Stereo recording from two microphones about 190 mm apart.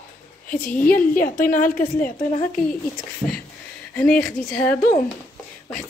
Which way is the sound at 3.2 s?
15° left (ahead or behind).